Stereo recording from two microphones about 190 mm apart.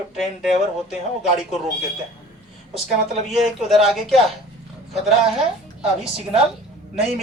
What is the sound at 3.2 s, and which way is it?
Speech, centre (ahead or behind).